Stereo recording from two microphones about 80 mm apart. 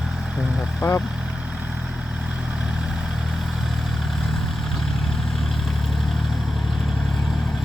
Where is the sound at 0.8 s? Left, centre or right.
Left.